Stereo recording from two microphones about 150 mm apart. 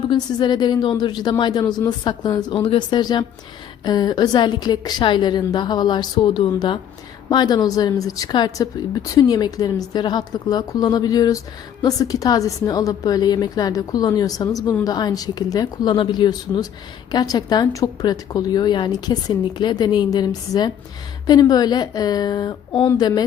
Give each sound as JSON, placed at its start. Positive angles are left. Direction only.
{"t": 0.1, "sound": "speech", "side_deg": 30}